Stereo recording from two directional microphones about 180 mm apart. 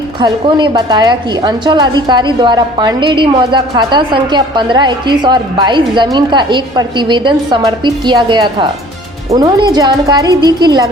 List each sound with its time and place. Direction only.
0.2 s a woman's voice: 25° right (ahead or behind)